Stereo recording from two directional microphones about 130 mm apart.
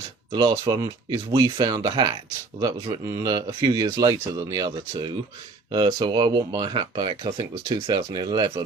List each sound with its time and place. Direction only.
0.3 s speech: 30° right (ahead or behind)